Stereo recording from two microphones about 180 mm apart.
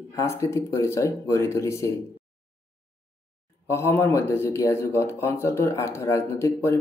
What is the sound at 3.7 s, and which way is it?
Speech, 15° left (ahead or behind).